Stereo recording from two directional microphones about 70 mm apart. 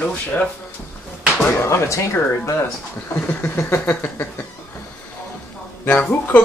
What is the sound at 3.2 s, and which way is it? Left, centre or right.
Speech, left.